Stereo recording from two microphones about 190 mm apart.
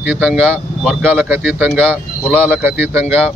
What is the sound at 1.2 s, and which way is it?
Speech, 10° right (ahead or behind).